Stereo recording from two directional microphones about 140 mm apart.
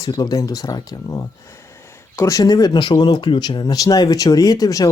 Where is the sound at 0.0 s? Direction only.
30° left (ahead or behind).